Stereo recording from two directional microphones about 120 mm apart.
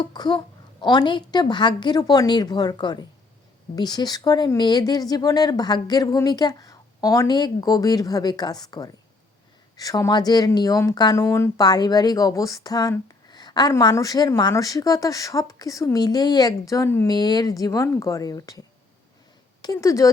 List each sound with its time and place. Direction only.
0.0 s speech: 40° left (ahead or behind)
11.2 s speech: 20° left (ahead or behind)
11.6 s a woman's voice: 35° left (ahead or behind)
17.1 s speech: 35° left (ahead or behind)
19.6 s speech: 30° left (ahead or behind)